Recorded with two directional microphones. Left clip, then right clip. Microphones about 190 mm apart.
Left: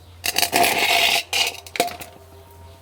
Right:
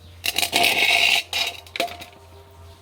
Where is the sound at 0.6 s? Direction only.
20° left (ahead or behind).